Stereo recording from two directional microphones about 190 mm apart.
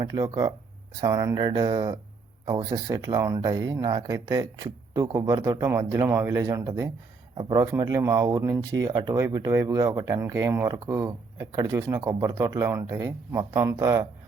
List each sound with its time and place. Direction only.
0.0 s speech: 20° right (ahead or behind)